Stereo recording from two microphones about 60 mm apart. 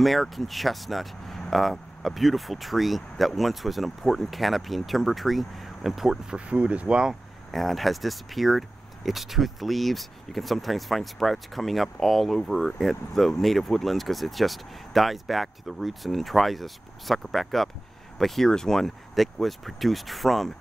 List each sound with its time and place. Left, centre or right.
0.0 s speech: centre
6.3 s speech: centre
7.5 s speech: centre